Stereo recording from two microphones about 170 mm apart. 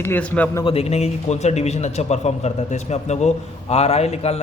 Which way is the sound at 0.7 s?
35° left (ahead or behind).